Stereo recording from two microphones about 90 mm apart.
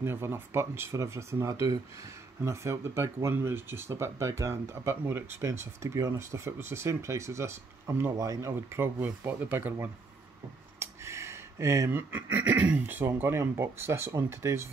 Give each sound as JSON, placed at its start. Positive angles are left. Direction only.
{"t": 0.0, "sound": "speech", "side_deg": -30}
{"t": 10.8, "sound": "a sound", "side_deg": -30}
{"t": 11.9, "sound": "speech", "side_deg": -20}